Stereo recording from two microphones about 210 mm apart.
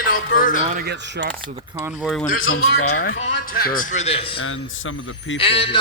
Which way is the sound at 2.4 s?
75° left (ahead or behind).